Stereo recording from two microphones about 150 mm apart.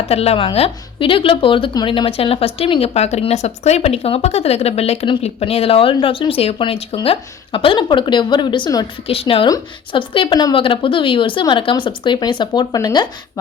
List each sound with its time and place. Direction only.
0.1 s a woman's voice: 45° left (ahead or behind); by 13.4 s 25° left (ahead or behind)